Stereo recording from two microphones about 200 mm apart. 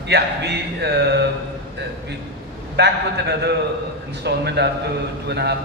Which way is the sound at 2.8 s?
55° right (ahead or behind).